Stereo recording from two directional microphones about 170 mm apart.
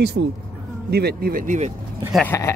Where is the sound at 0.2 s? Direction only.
80° right; by 1.6 s 60° right (ahead or behind).